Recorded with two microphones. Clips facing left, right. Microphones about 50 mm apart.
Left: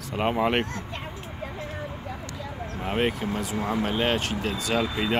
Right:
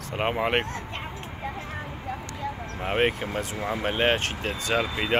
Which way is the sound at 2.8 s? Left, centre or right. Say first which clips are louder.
Right 1 dB; right.